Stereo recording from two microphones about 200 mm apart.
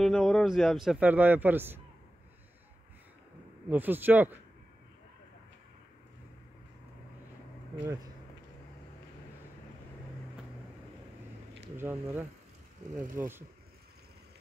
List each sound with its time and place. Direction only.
0.0 s speech: centre (ahead or behind)
3.6 s speech: 10° right (ahead or behind)
11.7 s speech: 10° right (ahead or behind)
12.8 s a sound: 35° right (ahead or behind)
13.2 s speech: 10° right (ahead or behind)